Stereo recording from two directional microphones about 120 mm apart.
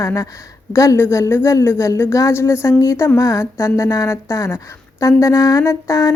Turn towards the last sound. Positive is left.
turn(degrees=25)  # may be behind; listen again after turning